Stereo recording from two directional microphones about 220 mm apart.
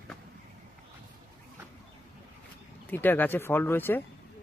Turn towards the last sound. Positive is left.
turn(degrees=10)  # may be behind; listen again after turning